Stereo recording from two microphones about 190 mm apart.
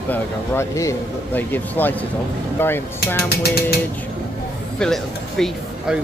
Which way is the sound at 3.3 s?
55° left (ahead or behind).